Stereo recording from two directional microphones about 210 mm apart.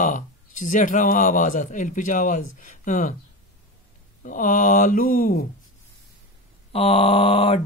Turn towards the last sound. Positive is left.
turn(degrees=25)  # may be behind; listen again after turning